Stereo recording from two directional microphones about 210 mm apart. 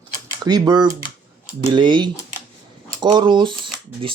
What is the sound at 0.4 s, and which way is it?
Speech, 20° right (ahead or behind).